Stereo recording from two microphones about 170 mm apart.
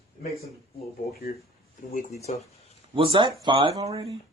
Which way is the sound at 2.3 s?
45° left (ahead or behind).